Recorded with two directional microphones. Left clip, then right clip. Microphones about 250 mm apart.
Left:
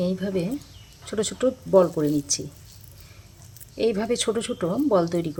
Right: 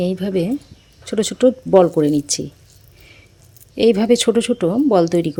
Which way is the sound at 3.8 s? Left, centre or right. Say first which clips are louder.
Right 9 dB; right.